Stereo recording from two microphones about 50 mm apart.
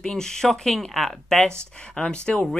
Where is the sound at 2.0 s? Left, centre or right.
Centre.